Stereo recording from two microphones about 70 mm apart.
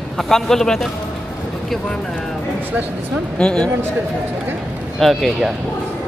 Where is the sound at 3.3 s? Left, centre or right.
Centre.